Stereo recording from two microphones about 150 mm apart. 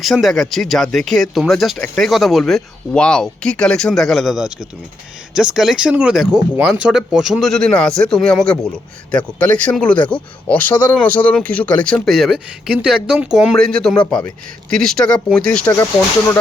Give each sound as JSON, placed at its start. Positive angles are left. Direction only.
{"t": 0.0, "sound": "speech", "side_deg": 0}